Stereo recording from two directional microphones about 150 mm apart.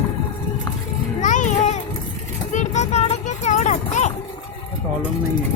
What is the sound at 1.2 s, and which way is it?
Music, 55° left (ahead or behind).